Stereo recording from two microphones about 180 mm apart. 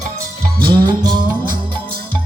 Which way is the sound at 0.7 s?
25° right (ahead or behind).